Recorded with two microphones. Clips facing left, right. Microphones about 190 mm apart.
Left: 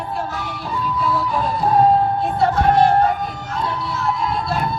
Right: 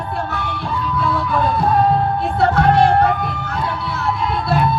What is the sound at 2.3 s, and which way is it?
Music, 65° right (ahead or behind).